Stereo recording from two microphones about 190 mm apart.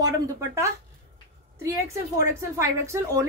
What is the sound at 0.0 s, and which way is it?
A woman's voice, 15° right (ahead or behind).